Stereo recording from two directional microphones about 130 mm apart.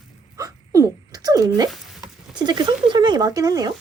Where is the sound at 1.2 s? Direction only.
30° right (ahead or behind).